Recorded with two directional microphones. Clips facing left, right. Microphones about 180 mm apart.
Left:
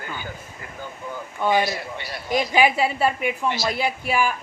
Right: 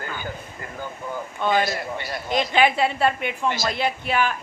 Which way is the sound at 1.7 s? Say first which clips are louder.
Right 2 dB; 45° right (ahead or behind).